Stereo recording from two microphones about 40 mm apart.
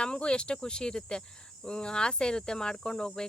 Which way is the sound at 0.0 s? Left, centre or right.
Left.